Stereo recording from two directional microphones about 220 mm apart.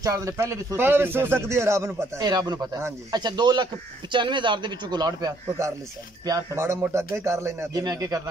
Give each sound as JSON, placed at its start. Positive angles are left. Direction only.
{"t": 0.0, "sound": "a man's voice", "side_deg": -15}